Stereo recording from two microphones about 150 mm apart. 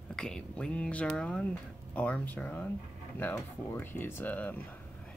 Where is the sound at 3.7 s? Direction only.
15° left (ahead or behind).